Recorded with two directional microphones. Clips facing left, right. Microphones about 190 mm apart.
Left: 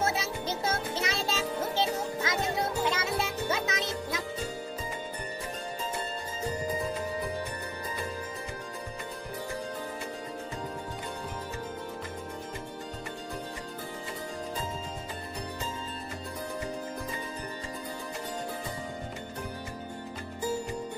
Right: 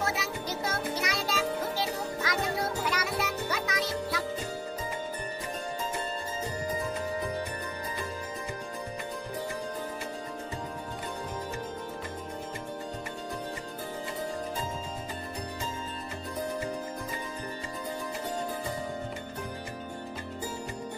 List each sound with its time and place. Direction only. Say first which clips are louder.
0.0 s music: left 2 dB; 25° left (ahead or behind)